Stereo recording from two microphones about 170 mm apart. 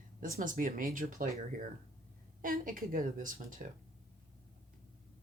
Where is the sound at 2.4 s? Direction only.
55° right (ahead or behind).